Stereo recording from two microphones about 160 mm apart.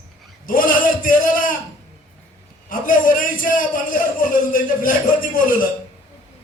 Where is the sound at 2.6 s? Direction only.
60° left (ahead or behind).